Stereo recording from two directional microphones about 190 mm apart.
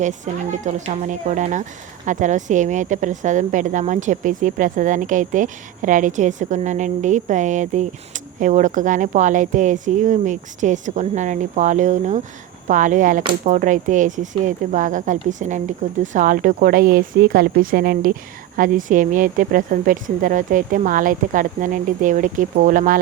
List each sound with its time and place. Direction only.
0.3 s speech: 40° right (ahead or behind)